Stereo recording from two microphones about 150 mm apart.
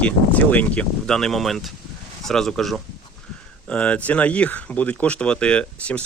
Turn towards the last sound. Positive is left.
turn(degrees=10)  # may be behind; listen again after turning